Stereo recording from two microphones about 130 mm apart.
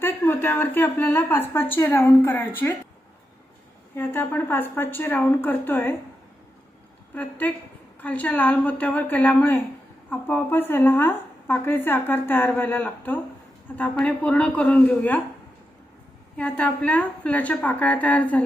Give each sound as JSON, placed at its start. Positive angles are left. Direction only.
{"t": 0.0, "sound": "a woman's voice", "side_deg": 15}
{"t": 3.9, "sound": "a woman's voice", "side_deg": 15}
{"t": 7.1, "sound": "a woman's voice", "side_deg": 15}
{"t": 16.4, "sound": "a woman's voice", "side_deg": 10}